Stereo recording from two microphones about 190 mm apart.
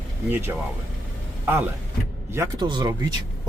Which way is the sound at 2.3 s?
20° right (ahead or behind).